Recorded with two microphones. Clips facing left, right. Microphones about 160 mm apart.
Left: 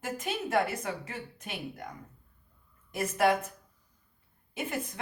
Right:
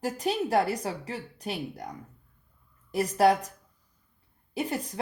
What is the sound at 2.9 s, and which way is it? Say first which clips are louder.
Speech: right 4 dB; 35° right (ahead or behind).